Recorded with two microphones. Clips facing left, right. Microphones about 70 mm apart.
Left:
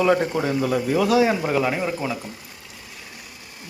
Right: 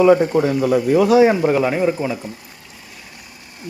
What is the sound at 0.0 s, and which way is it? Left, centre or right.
Speech, centre.